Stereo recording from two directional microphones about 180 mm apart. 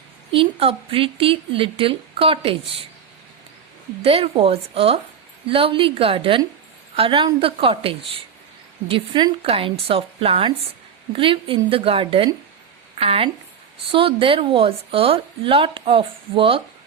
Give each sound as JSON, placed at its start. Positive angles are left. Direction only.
{"t": 0.3, "sound": "a woman's voice", "side_deg": -30}
{"t": 4.0, "sound": "a woman's voice", "side_deg": -30}